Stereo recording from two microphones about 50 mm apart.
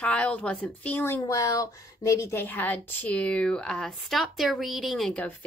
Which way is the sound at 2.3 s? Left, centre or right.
Left.